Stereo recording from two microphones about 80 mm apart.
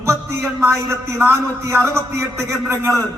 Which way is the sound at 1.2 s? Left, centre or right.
Right.